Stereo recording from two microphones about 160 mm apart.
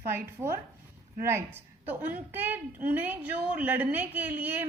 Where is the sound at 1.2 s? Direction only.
15° right (ahead or behind).